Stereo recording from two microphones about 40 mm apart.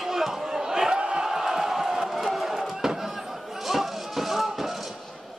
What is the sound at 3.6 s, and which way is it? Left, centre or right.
Music, centre.